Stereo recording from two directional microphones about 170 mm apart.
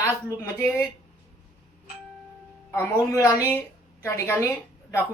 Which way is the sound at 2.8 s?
15° left (ahead or behind).